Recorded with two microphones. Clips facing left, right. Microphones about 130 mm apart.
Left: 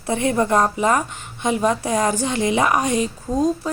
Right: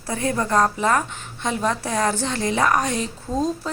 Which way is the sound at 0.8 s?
5° left (ahead or behind).